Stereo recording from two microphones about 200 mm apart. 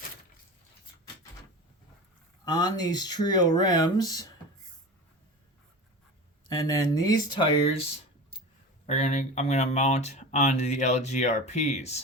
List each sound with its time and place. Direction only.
2.4 s speech: 20° left (ahead or behind)
6.7 s speech: 20° left (ahead or behind)
8.9 s speech: 35° left (ahead or behind)